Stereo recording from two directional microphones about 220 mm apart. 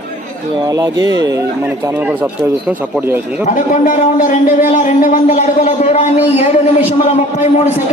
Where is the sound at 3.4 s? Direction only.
35° left (ahead or behind).